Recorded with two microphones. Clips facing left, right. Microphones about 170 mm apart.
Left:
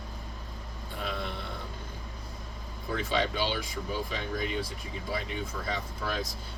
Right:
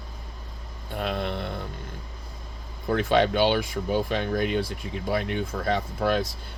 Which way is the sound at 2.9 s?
65° right (ahead or behind).